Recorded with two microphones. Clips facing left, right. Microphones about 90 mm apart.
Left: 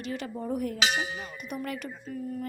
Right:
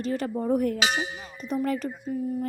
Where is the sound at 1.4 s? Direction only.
35° right (ahead or behind).